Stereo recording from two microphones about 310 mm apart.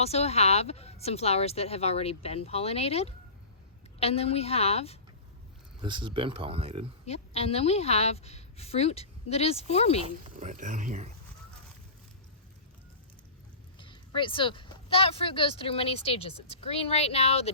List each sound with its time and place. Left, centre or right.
0.0 s speech: centre
5.8 s speech: centre
7.0 s speech: centre
10.0 s speech: right
13.7 s speech: centre